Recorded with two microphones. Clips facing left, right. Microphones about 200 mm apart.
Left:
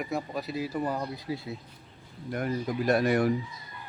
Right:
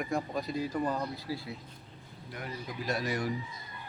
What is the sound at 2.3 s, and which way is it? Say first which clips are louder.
Speech: left 11 dB; 50° left (ahead or behind).